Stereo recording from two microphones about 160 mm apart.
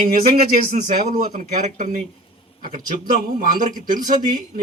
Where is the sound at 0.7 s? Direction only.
60° right (ahead or behind).